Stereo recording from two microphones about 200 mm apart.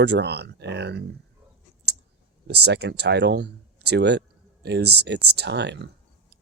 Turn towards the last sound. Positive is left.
turn(degrees=-60)  # may be behind; listen again after turning